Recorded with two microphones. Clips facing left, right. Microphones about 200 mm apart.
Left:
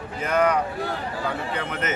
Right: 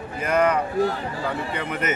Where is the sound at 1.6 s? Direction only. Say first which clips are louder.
Right 2 dB; 10° right (ahead or behind).